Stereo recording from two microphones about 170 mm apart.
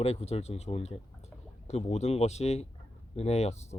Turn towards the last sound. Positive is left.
turn(degrees=40)  # may be behind; listen again after turning